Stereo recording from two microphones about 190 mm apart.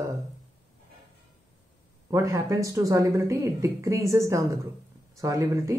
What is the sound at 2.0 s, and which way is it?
Speech, 15° right (ahead or behind).